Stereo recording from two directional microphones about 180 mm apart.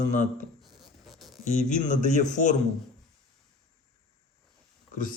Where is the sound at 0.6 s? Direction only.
Centre (ahead or behind).